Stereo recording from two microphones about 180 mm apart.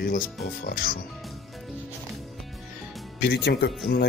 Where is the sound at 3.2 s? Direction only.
65° left (ahead or behind).